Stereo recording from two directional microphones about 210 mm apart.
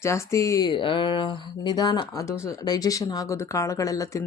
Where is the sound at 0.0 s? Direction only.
15° left (ahead or behind).